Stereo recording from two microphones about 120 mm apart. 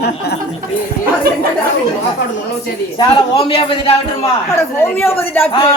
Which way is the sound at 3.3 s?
50° left (ahead or behind).